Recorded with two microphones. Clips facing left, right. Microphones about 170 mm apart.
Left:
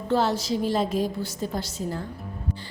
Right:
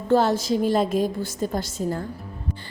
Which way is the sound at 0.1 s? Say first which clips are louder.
Right 4 dB; 50° right (ahead or behind).